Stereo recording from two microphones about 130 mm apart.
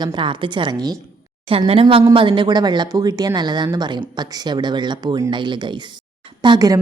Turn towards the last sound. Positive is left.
turn(degrees=-30)  # may be behind; listen again after turning